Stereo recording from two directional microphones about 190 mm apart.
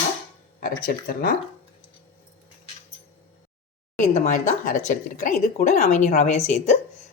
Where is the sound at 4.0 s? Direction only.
40° left (ahead or behind).